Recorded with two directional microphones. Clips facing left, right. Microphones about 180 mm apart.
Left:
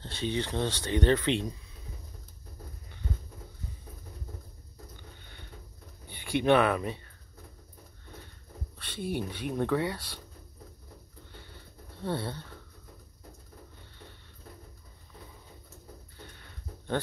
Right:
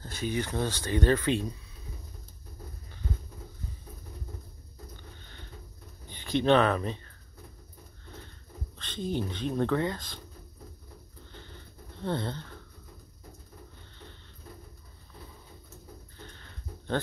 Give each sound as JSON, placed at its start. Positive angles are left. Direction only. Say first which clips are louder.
{"t": 0.0, "sound": "speech", "louder": "even", "side_deg": 25}
{"t": 6.0, "sound": "speech", "louder": "even", "side_deg": 10}
{"t": 8.7, "sound": "speech", "louder": "right 1 dB", "side_deg": 10}
{"t": 12.0, "sound": "speech", "louder": "right 1 dB", "side_deg": 10}
{"t": 16.3, "sound": "a sound", "louder": "right 1 dB", "side_deg": 15}